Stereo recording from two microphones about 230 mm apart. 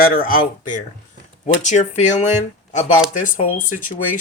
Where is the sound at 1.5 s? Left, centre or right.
Left.